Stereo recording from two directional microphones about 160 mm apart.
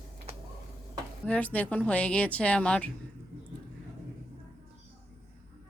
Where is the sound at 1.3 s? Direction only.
10° left (ahead or behind).